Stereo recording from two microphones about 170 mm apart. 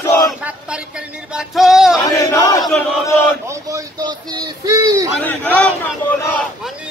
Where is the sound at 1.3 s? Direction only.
Centre (ahead or behind).